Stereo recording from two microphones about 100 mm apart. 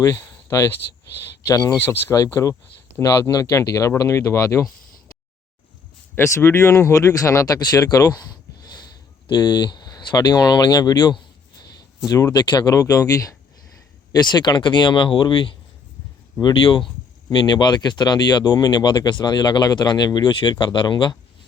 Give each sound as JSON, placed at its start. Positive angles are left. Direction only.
{"t": 0.0, "sound": "speech", "side_deg": 30}
{"t": 6.1, "sound": "speech", "side_deg": 25}
{"t": 12.0, "sound": "speech", "side_deg": 35}
{"t": 14.1, "sound": "speech", "side_deg": 45}